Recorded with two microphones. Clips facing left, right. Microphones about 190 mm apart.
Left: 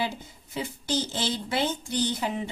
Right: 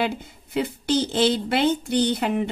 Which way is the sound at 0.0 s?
60° right (ahead or behind).